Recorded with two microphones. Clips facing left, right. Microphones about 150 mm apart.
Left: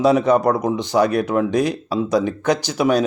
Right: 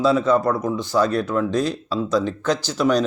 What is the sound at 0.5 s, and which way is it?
Speech, 15° left (ahead or behind).